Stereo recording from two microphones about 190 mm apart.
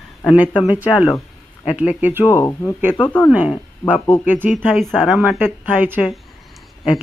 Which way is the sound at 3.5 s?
5° left (ahead or behind).